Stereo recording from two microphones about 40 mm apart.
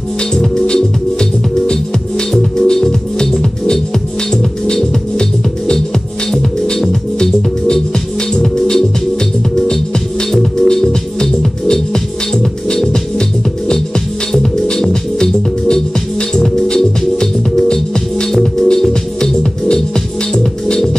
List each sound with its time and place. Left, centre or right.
0.3 s music: centre
4.7 s music: centre
10.3 s music: centre